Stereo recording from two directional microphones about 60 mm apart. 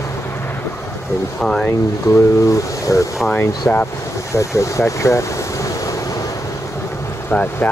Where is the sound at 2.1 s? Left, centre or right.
Left.